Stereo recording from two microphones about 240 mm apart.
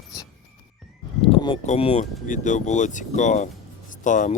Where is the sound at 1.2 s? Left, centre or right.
Left.